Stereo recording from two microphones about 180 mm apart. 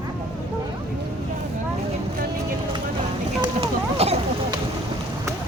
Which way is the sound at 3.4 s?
35° right (ahead or behind).